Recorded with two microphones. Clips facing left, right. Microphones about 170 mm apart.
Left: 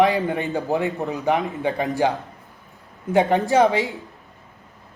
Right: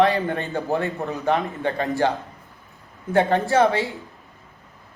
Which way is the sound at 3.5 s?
15° left (ahead or behind).